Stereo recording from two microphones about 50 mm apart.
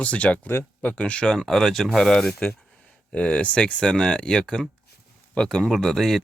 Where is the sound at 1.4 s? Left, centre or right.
Centre.